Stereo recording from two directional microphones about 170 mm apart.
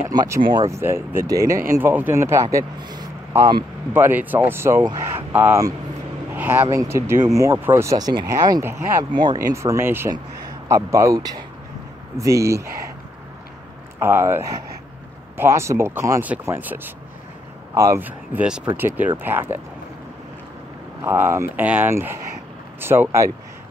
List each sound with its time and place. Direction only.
0.0 s speech: 20° right (ahead or behind)
3.9 s speech: 10° right (ahead or behind)
13.9 s speech: 15° right (ahead or behind)
21.0 s speech: 15° right (ahead or behind)